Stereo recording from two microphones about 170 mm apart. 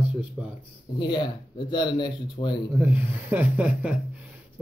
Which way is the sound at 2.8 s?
10° right (ahead or behind).